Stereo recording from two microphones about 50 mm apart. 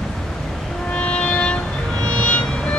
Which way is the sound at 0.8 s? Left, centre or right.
Left.